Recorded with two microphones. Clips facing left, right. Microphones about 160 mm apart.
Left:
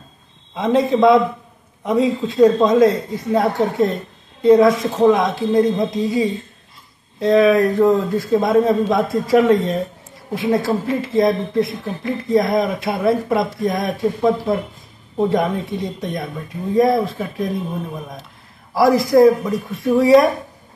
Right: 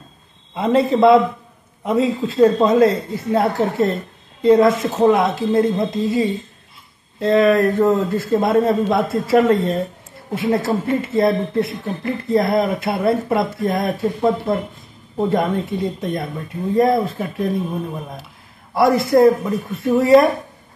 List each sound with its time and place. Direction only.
0.6 s speech: centre (ahead or behind)
18.8 s speech: centre (ahead or behind)